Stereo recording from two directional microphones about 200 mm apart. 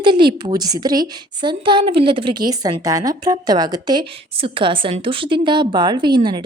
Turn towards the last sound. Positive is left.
turn(degrees=-20)  # may be behind; listen again after turning